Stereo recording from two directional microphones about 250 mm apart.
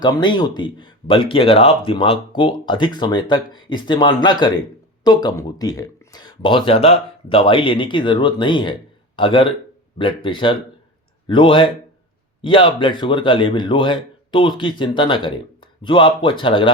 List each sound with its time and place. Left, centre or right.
0.0 s speech: centre